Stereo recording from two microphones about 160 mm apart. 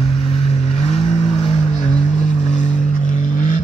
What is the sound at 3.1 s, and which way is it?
Vehicle, 55° left (ahead or behind).